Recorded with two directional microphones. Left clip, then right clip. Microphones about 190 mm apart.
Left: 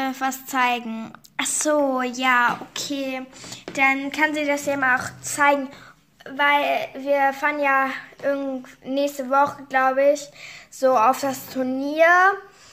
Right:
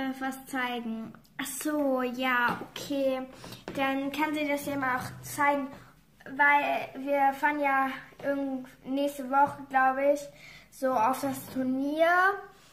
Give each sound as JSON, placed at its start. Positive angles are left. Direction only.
{"t": 0.0, "sound": "speech", "side_deg": 45}
{"t": 6.2, "sound": "a woman's voice", "side_deg": 55}